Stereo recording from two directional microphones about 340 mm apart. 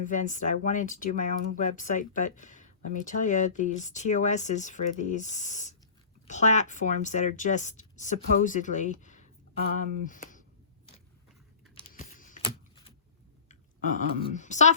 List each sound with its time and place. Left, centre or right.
0.0 s speech: left
11.7 s computer keyboard: centre
13.5 s speech: left